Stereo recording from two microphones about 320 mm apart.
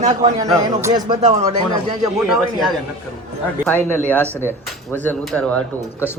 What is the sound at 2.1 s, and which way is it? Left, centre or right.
A man's voice, centre.